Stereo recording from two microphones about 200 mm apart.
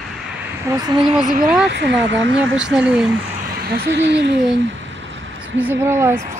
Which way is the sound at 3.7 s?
55° right (ahead or behind).